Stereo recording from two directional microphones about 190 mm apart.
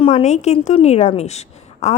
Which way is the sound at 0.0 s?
35° left (ahead or behind).